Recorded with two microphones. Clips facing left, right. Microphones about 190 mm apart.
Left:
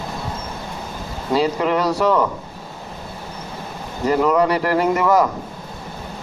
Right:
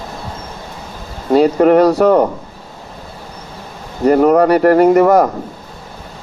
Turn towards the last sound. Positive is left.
turn(degrees=-50)  # may be behind; listen again after turning